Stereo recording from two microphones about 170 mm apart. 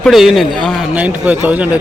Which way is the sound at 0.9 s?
10° right (ahead or behind).